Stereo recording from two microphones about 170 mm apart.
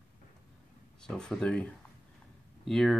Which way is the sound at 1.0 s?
5° left (ahead or behind).